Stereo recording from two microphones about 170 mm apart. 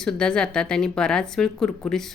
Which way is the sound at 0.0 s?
5° left (ahead or behind).